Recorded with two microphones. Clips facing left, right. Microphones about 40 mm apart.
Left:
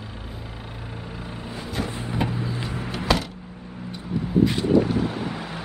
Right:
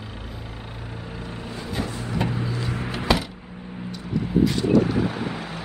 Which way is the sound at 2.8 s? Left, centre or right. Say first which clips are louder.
Even; centre.